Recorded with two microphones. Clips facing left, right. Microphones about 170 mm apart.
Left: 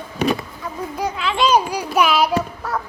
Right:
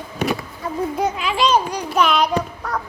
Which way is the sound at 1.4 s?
10° left (ahead or behind).